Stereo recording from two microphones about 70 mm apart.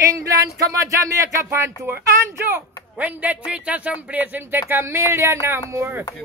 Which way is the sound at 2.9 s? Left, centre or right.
Right.